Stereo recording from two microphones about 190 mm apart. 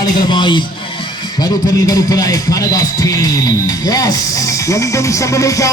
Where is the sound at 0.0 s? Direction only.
25° left (ahead or behind).